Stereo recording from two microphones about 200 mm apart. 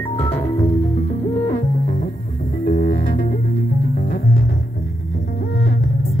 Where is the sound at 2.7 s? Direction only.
45° left (ahead or behind).